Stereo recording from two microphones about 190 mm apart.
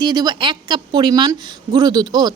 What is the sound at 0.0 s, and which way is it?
A woman's voice, 20° right (ahead or behind).